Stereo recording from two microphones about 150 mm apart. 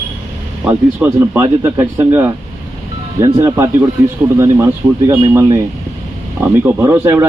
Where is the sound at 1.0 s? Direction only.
20° right (ahead or behind).